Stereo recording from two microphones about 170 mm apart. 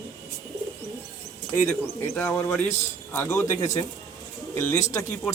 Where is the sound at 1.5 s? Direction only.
15° left (ahead or behind).